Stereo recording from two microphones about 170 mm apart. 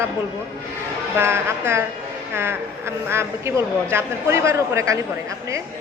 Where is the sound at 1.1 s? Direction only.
15° right (ahead or behind).